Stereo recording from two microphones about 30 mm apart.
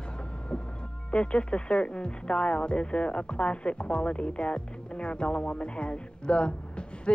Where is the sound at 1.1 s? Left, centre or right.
Left.